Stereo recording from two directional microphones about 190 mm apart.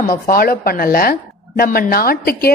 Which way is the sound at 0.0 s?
50° left (ahead or behind).